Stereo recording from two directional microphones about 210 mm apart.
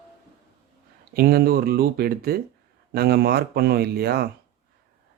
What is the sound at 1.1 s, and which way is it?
Speech, 45° right (ahead or behind).